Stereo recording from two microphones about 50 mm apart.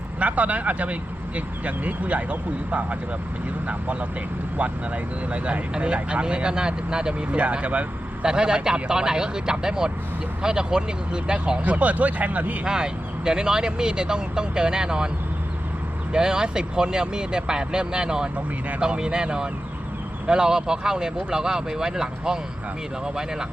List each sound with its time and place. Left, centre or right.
0.2 s speech: right
5.3 s speech: right
8.2 s speech: centre
11.6 s speech: right
12.6 s speech: centre
16.1 s speech: centre